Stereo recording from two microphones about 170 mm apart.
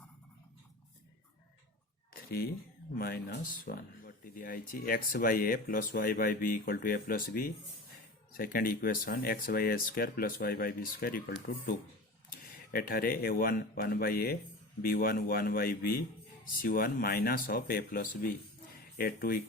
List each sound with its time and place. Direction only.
3.0 s speech: 65° left (ahead or behind)